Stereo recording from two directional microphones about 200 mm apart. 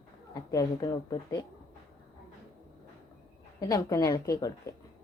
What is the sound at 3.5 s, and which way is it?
A woman's voice, 15° left (ahead or behind).